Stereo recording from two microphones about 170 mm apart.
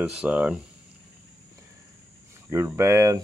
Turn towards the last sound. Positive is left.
turn(degrees=-20)  # may be behind; listen again after turning